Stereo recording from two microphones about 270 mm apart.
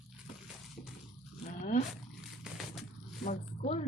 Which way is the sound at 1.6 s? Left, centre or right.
Left.